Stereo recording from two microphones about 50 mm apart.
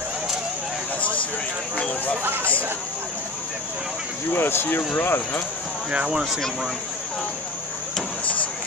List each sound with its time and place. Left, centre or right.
4.3 s speech: left
6.0 s speech: centre